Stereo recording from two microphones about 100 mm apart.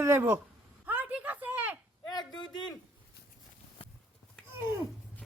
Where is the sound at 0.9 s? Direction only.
15° right (ahead or behind).